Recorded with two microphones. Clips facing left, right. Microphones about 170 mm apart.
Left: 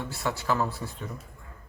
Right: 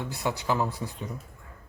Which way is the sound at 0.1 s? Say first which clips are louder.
Even; 15° right (ahead or behind).